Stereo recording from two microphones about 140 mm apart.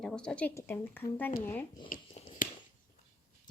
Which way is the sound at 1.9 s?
75° left (ahead or behind).